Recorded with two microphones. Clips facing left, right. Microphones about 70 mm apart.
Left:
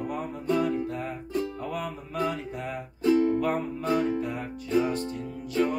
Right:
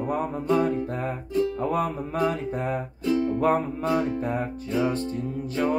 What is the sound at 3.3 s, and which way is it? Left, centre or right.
Music, right.